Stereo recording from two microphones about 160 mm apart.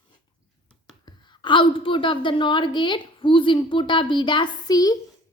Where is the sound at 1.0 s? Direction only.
30° left (ahead or behind).